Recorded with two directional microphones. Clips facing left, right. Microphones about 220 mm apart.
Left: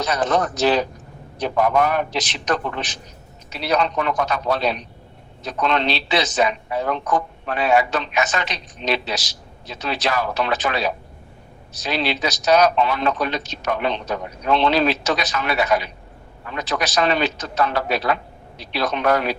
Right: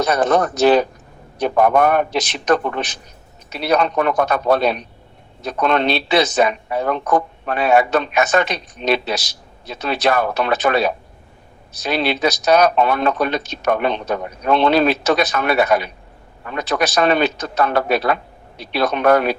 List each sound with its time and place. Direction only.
0.0 s a man's voice: 55° right (ahead or behind)